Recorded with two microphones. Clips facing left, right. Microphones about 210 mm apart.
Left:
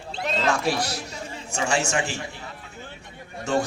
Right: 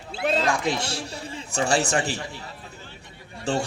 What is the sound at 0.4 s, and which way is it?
A man's voice, 15° right (ahead or behind).